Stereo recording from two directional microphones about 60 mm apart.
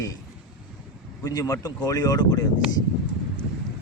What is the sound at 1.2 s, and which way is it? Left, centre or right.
Speech, left.